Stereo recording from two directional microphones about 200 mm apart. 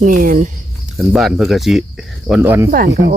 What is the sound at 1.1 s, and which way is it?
Speech, centre (ahead or behind).